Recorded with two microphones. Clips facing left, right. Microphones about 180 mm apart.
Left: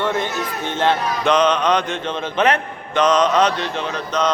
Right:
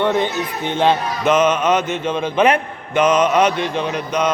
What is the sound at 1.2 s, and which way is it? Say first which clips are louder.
A man's voice: right 1 dB; 5° right (ahead or behind).